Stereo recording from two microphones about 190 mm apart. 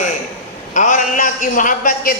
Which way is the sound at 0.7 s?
40° left (ahead or behind).